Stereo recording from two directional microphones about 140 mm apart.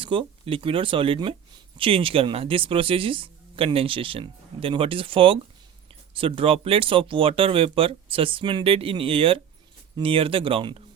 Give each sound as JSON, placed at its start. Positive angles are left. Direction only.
{"t": 0.0, "sound": "speech", "side_deg": -40}